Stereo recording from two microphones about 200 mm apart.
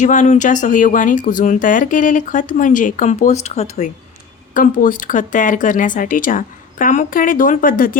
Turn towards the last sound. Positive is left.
turn(degrees=45)  # may be behind; listen again after turning